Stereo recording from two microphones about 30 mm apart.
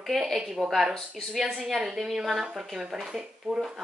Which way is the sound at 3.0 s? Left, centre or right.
Centre.